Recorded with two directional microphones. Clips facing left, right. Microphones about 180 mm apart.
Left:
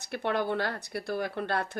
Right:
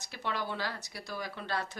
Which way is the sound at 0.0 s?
55° left (ahead or behind).